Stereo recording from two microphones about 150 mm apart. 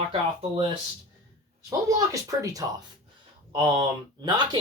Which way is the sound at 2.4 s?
25° right (ahead or behind).